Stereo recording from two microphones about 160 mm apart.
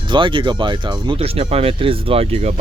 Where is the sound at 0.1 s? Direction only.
30° right (ahead or behind).